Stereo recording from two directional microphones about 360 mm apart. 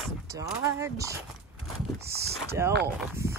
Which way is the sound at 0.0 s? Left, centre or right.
Centre.